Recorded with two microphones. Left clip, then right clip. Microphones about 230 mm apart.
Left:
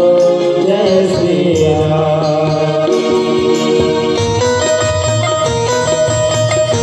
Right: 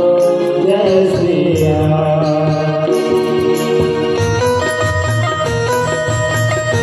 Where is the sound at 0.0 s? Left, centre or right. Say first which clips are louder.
Left 2 dB; left.